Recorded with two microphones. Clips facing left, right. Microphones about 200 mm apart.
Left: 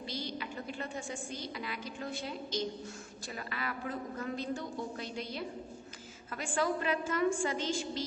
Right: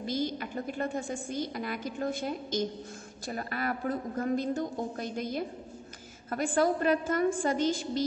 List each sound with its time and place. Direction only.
0.0 s a woman's voice: 50° right (ahead or behind)